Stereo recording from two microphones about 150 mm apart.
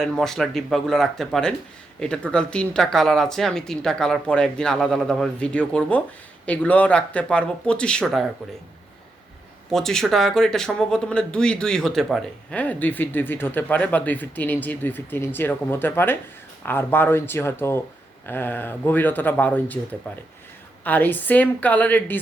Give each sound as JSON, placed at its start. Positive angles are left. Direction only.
{"t": 0.0, "sound": "speech", "side_deg": 5}
{"t": 9.7, "sound": "speech", "side_deg": 5}